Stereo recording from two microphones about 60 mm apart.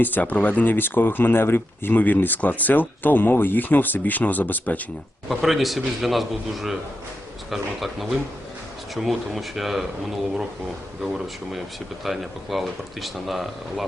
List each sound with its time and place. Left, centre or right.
0.0 s speech: left
5.3 s speech: centre
12.0 s speech: centre